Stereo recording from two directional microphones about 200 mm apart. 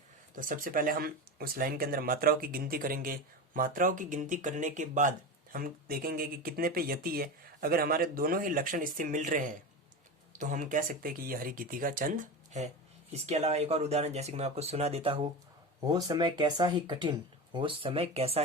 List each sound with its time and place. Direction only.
0.3 s speech: 40° right (ahead or behind)